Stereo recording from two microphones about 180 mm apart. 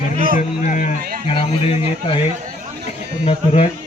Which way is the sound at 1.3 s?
30° left (ahead or behind).